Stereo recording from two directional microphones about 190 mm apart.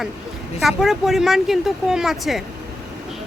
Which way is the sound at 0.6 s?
Centre (ahead or behind).